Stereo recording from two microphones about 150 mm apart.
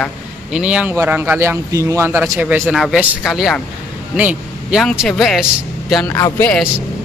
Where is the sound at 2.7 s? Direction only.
Centre (ahead or behind).